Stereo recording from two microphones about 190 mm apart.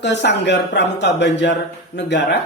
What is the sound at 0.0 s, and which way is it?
Speech, 65° left (ahead or behind).